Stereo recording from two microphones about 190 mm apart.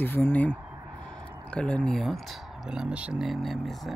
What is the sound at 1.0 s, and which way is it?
Speech, 5° left (ahead or behind).